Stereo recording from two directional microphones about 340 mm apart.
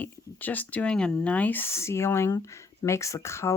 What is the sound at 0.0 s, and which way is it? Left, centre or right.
Speech, centre.